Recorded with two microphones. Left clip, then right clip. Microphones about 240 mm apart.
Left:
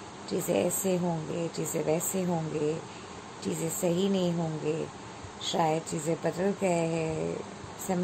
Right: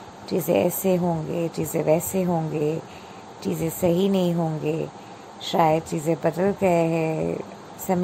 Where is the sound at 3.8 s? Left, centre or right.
Right.